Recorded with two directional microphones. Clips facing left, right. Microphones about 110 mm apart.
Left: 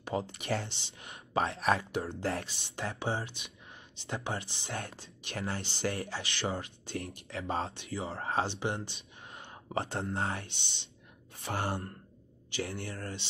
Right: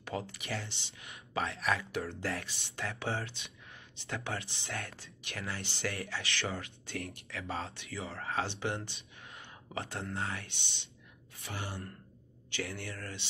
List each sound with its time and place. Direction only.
0.0 s a sound: 25° left (ahead or behind)
0.3 s speech: 35° left (ahead or behind)
11.5 s speech: 55° left (ahead or behind)
12.6 s speech: 30° left (ahead or behind)